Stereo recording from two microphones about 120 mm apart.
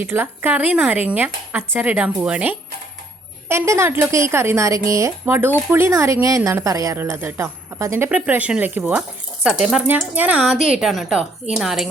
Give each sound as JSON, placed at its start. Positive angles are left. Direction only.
{"t": 0.0, "sound": "a woman's voice", "side_deg": -15}